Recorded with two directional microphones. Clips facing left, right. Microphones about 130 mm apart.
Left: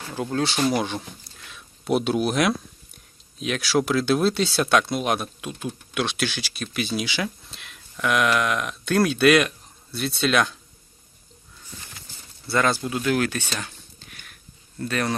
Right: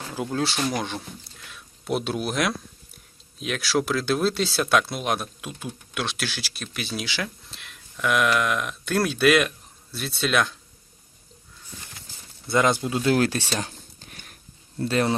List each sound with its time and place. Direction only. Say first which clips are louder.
0.1 s speech: left 2 dB; 5° right (ahead or behind)
12.5 s speech: right 1 dB; 20° right (ahead or behind); by 14.3 s 35° right (ahead or behind)
14.8 s speech: right 3 dB; 25° right (ahead or behind)